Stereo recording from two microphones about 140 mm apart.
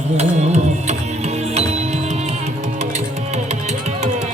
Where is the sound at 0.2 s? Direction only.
50° right (ahead or behind).